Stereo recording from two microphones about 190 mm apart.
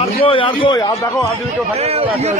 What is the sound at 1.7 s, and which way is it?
Speech, 35° right (ahead or behind).